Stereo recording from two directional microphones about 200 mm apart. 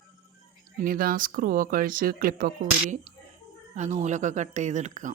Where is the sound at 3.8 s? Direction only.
35° right (ahead or behind).